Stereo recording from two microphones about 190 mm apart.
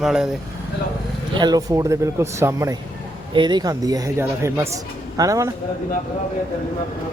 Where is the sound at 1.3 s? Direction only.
20° right (ahead or behind).